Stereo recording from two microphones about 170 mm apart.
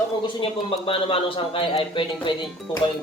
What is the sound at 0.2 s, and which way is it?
A man's voice, 30° left (ahead or behind).